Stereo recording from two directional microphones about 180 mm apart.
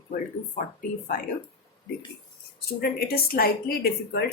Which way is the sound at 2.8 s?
60° left (ahead or behind).